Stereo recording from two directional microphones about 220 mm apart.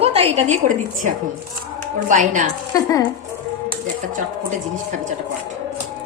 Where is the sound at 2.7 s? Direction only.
15° left (ahead or behind).